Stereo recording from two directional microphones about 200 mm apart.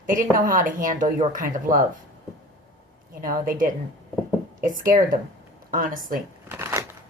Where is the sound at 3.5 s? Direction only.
40° right (ahead or behind).